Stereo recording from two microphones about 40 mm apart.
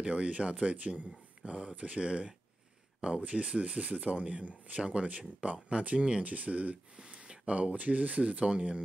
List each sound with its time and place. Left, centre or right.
0.0 s speech: right
6.2 s speech: right
7.0 s speech: right